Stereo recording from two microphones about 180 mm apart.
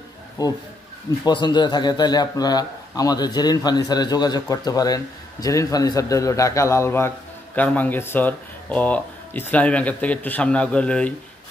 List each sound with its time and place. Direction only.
0.4 s a man's voice: 20° left (ahead or behind)